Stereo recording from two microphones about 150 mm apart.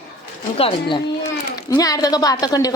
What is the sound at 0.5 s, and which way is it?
Speech, 35° left (ahead or behind).